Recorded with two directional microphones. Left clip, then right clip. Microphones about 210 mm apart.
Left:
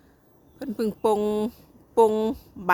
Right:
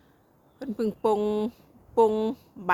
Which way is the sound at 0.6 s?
15° left (ahead or behind).